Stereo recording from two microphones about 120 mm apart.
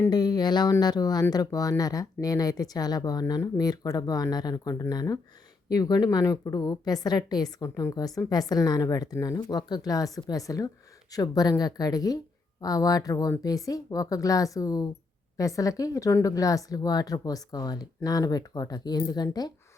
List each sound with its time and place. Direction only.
0.1 s a woman's voice: 35° left (ahead or behind)